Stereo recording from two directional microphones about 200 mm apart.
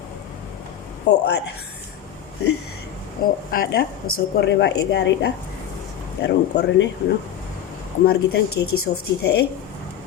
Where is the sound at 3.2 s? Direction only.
45° left (ahead or behind).